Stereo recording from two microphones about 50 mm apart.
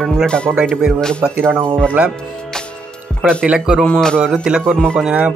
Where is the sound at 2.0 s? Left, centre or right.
Right.